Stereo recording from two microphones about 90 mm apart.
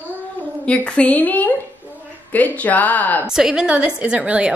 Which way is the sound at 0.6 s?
10° left (ahead or behind).